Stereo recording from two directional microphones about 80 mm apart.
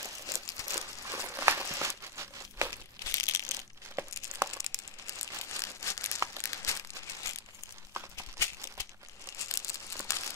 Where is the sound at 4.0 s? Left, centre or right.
Right.